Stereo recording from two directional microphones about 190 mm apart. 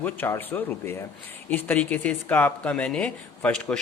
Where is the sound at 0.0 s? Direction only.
10° left (ahead or behind).